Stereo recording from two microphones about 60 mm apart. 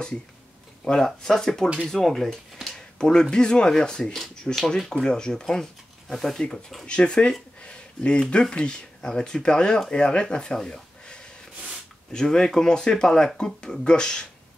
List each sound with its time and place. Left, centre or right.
0.8 s speech: centre